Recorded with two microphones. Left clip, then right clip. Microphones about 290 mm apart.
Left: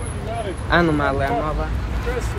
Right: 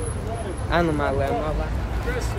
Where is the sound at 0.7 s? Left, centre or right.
Left.